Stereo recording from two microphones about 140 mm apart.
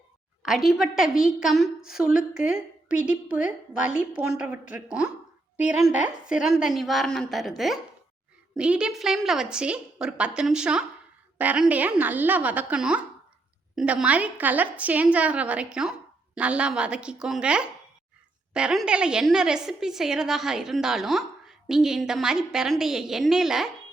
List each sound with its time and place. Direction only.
0.4 s a woman's voice: centre (ahead or behind)